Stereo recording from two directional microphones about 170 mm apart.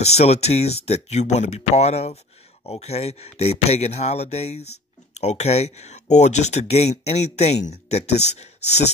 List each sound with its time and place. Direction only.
0.0 s speech: 40° left (ahead or behind)